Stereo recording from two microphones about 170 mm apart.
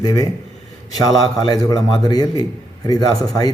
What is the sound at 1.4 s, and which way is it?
Speech, 20° left (ahead or behind).